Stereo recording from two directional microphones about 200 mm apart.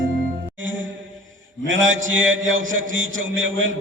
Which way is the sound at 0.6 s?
70° right (ahead or behind).